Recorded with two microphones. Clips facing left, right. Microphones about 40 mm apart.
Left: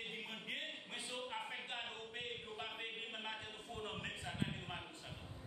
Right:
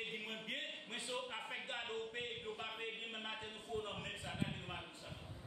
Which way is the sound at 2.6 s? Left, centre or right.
Centre.